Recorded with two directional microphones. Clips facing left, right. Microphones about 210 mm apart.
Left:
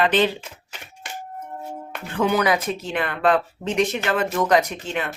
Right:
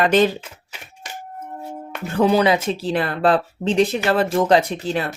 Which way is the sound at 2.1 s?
30° right (ahead or behind).